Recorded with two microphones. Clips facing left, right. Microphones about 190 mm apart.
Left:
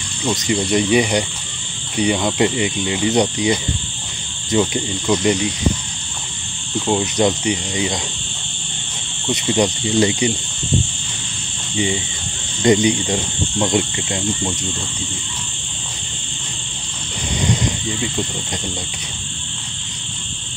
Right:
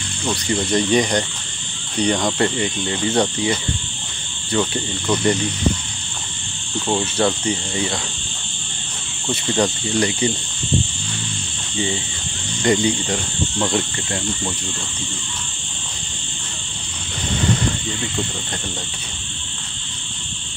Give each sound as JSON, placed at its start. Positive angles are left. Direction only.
{"t": 0.2, "sound": "speech", "side_deg": 10}
{"t": 6.9, "sound": "speech", "side_deg": 15}
{"t": 9.3, "sound": "speech", "side_deg": 15}
{"t": 12.6, "sound": "cricket", "side_deg": 20}